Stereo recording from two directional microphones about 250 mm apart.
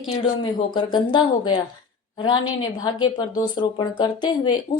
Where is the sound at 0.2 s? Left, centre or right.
Centre.